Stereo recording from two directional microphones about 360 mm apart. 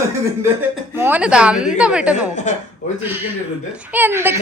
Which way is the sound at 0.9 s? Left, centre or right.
Centre.